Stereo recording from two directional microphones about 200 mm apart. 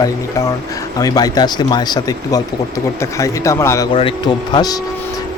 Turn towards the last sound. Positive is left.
turn(degrees=20)  # may be behind; listen again after turning